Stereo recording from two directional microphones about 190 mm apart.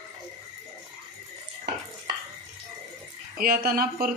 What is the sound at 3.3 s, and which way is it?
Speech, 50° right (ahead or behind).